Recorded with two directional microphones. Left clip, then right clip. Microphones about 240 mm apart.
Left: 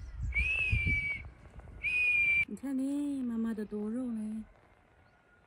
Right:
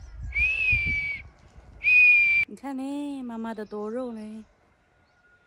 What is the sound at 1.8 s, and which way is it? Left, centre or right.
Whistle, centre.